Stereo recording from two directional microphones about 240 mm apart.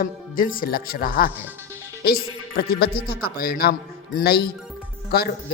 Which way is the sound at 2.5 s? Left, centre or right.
Left.